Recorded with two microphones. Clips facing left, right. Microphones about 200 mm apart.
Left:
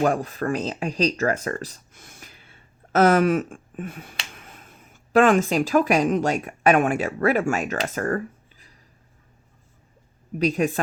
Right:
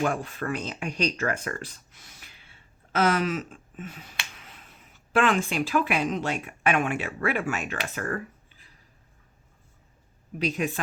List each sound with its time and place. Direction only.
0.0 s speech: 40° left (ahead or behind)
10.3 s speech: 40° left (ahead or behind)